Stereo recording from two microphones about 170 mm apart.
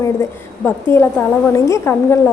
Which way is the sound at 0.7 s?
10° left (ahead or behind).